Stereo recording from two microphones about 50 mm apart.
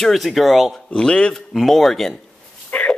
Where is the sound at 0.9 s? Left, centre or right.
Centre.